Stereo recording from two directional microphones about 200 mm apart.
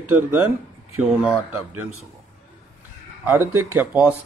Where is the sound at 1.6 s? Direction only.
90° right.